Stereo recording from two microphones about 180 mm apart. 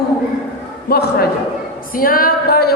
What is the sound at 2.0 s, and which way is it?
Music, 55° left (ahead or behind).